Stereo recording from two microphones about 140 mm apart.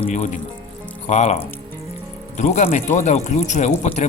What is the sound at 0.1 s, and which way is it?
Speech, 65° left (ahead or behind).